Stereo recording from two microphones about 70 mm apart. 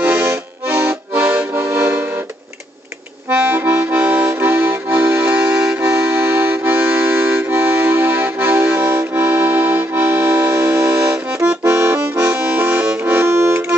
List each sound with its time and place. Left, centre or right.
0.0 s accordion: right
1.9 s music: right
3.3 s accordion: right
6.2 s accordion: right
11.6 s accordion: right
12.3 s accordion: centre